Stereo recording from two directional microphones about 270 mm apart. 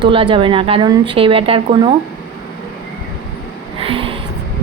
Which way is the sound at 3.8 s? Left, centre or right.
Centre.